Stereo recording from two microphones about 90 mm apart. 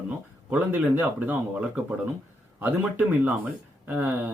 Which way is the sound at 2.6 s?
20° right (ahead or behind).